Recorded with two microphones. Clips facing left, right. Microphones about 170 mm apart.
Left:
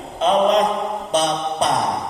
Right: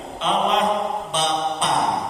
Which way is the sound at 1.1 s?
40° left (ahead or behind).